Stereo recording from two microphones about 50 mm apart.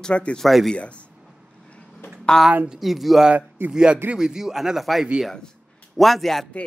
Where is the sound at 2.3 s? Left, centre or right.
Centre.